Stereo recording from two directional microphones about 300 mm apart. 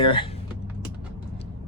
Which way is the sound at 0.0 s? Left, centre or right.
Centre.